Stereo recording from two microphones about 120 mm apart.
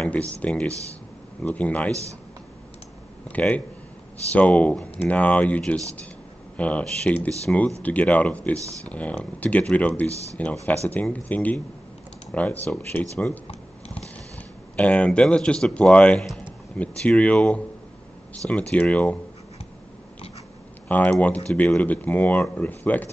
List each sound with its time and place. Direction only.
0.0 s speech: 10° left (ahead or behind)
3.3 s speech: 10° left (ahead or behind)
13.5 s typing: 60° left (ahead or behind)
14.8 s speech: 10° left (ahead or behind)
20.9 s speech: 15° left (ahead or behind)